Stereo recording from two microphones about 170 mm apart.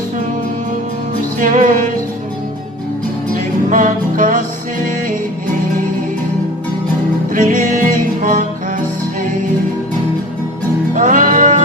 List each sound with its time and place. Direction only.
1.4 s music: 50° right (ahead or behind)
3.7 s music: 50° right (ahead or behind)
7.3 s music: 50° right (ahead or behind)
10.9 s music: 50° right (ahead or behind)